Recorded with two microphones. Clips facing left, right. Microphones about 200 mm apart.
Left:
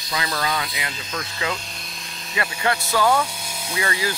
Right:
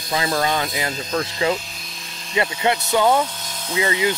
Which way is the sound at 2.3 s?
25° right (ahead or behind).